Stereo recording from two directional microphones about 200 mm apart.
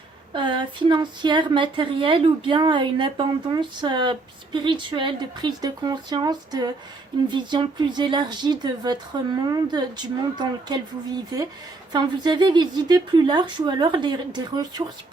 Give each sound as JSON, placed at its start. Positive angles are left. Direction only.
{"t": 0.3, "sound": "a woman's voice", "side_deg": -25}
{"t": 11.9, "sound": "a woman's voice", "side_deg": -20}